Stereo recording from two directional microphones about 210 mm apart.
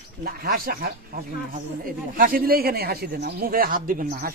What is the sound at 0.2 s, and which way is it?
Speech, 45° right (ahead or behind).